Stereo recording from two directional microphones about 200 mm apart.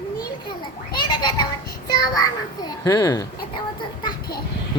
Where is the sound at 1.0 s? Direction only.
20° left (ahead or behind).